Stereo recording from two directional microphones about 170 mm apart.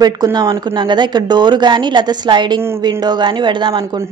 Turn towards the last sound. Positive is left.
turn(degrees=-25)  # may be behind; listen again after turning